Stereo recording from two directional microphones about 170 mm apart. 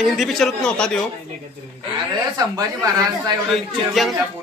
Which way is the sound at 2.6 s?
20° right (ahead or behind).